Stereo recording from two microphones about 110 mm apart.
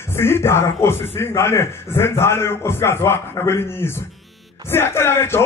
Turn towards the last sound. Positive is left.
turn(degrees=20)  # may be behind; listen again after turning